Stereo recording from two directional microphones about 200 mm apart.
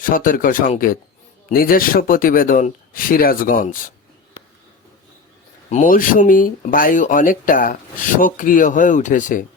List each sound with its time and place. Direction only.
0.0 s speech: 45° left (ahead or behind)
5.7 s speech: 40° left (ahead or behind)